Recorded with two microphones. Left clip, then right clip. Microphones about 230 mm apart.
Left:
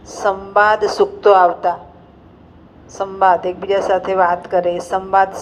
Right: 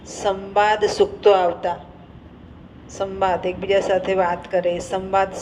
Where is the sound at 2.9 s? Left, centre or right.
Left.